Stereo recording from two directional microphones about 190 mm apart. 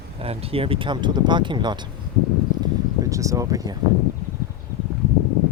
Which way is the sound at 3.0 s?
15° right (ahead or behind).